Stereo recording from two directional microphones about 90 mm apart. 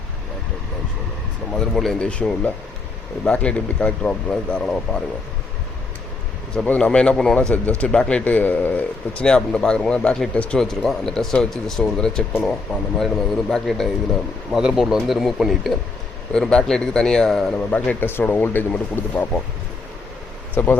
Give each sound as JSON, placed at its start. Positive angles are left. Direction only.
{"t": 1.5, "sound": "speech", "side_deg": 5}
{"t": 6.5, "sound": "a man's voice", "side_deg": 10}
{"t": 17.7, "sound": "speech", "side_deg": 20}
{"t": 20.6, "sound": "speech", "side_deg": 20}